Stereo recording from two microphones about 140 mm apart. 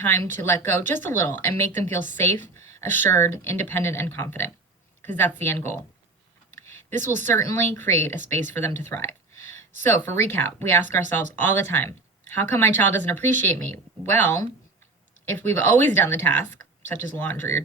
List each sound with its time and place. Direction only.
0.0 s speech: 15° left (ahead or behind)
6.9 s a woman's voice: 60° right (ahead or behind)
7.2 s speech: 15° left (ahead or behind)
8.8 s a sound: 15° left (ahead or behind)
9.8 s speech: 15° left (ahead or behind)